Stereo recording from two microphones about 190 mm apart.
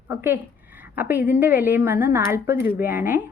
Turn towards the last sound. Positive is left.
turn(degrees=-10)  # may be behind; listen again after turning